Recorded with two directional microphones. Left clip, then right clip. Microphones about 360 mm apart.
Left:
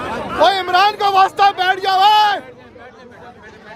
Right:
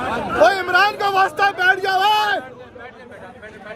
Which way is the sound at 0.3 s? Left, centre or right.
Centre.